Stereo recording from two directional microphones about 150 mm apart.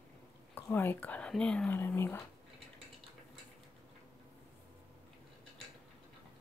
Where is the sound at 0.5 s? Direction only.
15° left (ahead or behind).